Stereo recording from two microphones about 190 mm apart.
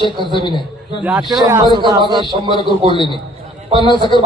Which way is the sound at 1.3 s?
20° right (ahead or behind).